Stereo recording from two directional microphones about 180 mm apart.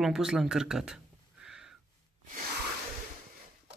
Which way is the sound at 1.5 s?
5° right (ahead or behind).